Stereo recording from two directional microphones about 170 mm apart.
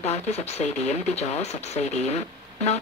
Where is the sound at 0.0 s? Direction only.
40° left (ahead or behind).